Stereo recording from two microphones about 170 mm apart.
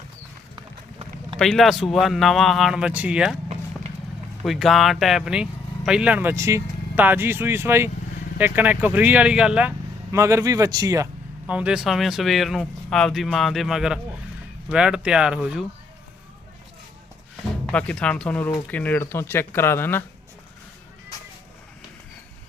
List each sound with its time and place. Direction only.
0.5 s run: 25° right (ahead or behind)
1.4 s speech: centre (ahead or behind)
4.4 s speech: centre (ahead or behind)
10.1 s speech: 20° right (ahead or behind)
11.4 s speech: 5° right (ahead or behind)
17.7 s speech: 5° left (ahead or behind)